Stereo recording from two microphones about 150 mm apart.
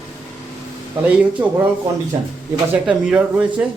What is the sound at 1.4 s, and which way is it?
Speech, 15° right (ahead or behind).